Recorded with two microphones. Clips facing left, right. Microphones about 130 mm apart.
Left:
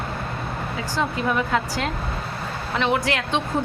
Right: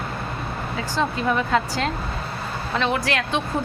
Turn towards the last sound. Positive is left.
turn(degrees=20)  # may be behind; listen again after turning